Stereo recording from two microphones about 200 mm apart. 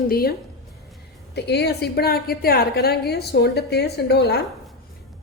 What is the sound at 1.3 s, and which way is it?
A woman's voice, 55° left (ahead or behind).